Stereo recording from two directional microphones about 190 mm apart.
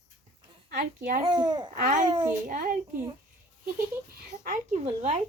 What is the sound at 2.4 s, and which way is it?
Speech, 45° right (ahead or behind).